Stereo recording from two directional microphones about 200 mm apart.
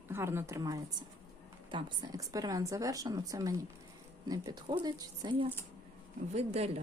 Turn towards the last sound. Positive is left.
turn(degrees=-30)  # may be behind; listen again after turning